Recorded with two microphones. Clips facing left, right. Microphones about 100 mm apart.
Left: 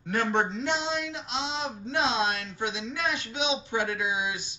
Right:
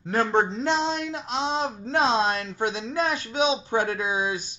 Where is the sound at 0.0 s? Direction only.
35° right (ahead or behind).